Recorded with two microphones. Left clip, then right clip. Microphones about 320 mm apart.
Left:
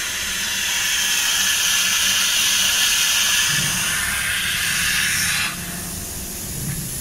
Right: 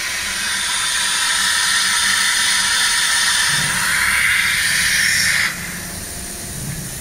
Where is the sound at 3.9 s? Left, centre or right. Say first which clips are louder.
Right 7 dB; centre.